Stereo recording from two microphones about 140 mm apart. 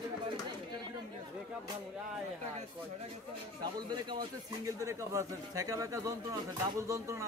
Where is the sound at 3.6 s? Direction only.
30° right (ahead or behind).